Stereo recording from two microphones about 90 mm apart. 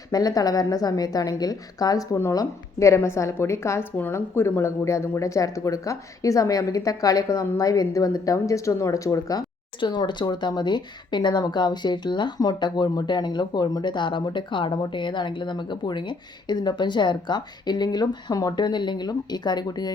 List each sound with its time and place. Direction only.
0.1 s a woman's voice: 45° left (ahead or behind)
9.8 s speech: 60° left (ahead or behind)